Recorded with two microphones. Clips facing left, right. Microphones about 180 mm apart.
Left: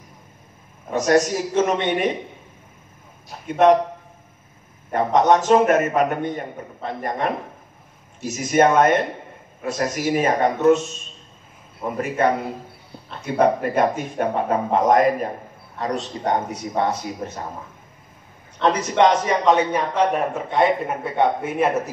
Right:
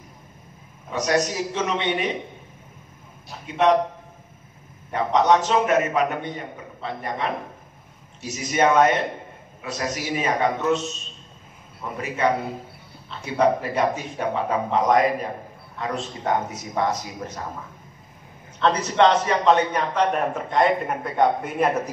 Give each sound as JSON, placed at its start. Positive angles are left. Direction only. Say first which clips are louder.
{"t": 0.8, "sound": "a man's voice", "louder": "left 5 dB", "side_deg": 45}
{"t": 3.4, "sound": "a man's voice", "louder": "left 5 dB", "side_deg": 45}
{"t": 4.9, "sound": "a man's voice", "louder": "left 2 dB", "side_deg": 50}
{"t": 12.2, "sound": "a man's voice", "louder": "left 1 dB", "side_deg": 50}
{"t": 16.0, "sound": "speech", "louder": "right 1 dB", "side_deg": 35}
{"t": 18.6, "sound": "a man's voice", "louder": "left 1 dB", "side_deg": 15}